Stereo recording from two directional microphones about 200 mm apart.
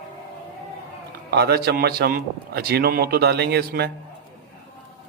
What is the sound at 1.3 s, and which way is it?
A man's voice, 50° right (ahead or behind).